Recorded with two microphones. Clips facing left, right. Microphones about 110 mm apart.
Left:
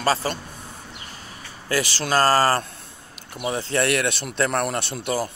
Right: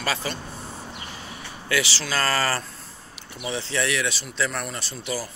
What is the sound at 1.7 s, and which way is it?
Speech, 50° left (ahead or behind).